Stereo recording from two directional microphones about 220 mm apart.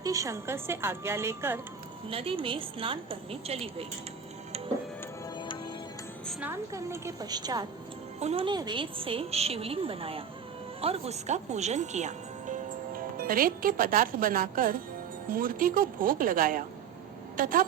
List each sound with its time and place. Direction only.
0.0 s speech: 15° right (ahead or behind)
2.0 s a woman's voice: 25° right (ahead or behind)
5.4 s music: 20° left (ahead or behind)
6.4 s a woman's voice: 10° right (ahead or behind); by 17.7 s 40° right (ahead or behind)